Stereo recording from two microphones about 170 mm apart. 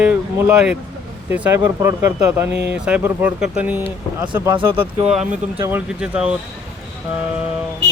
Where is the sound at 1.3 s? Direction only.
15° right (ahead or behind).